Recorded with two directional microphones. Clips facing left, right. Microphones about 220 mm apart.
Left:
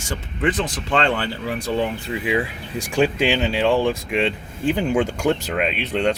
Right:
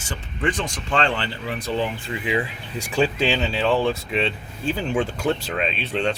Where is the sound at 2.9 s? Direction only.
15° left (ahead or behind).